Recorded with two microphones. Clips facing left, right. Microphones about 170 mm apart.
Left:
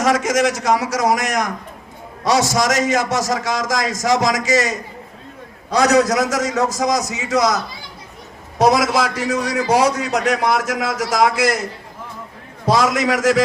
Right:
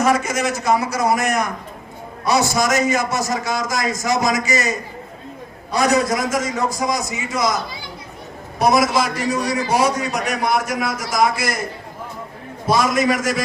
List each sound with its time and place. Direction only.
0.0 s a man's voice: 90° left
8.5 s a man's voice: 90° left
12.6 s a man's voice: 90° left